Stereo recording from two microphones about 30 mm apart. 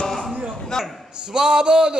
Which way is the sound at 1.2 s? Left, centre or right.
Right.